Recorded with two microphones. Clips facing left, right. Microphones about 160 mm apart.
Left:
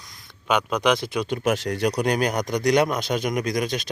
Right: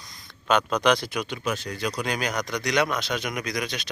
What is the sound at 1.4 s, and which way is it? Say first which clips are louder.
A man's voice: left 9 dB; 75° left (ahead or behind).